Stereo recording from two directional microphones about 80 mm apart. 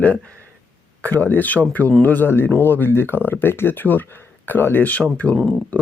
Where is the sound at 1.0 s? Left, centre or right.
Left.